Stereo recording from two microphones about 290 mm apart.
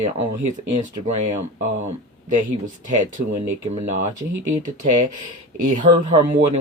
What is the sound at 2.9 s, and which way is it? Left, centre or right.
Speech, right.